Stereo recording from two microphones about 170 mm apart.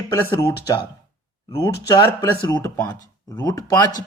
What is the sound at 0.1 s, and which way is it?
Speech, 20° left (ahead or behind).